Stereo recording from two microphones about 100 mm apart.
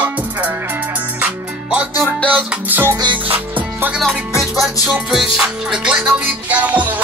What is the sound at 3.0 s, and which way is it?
Music, 50° right (ahead or behind).